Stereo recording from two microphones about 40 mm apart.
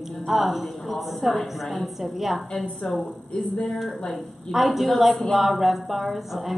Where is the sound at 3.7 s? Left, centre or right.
Centre.